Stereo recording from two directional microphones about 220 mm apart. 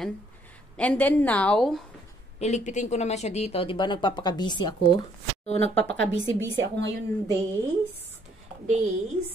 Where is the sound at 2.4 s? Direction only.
30° left (ahead or behind).